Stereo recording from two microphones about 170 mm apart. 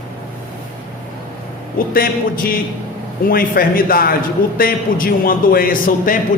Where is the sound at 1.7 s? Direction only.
60° left (ahead or behind).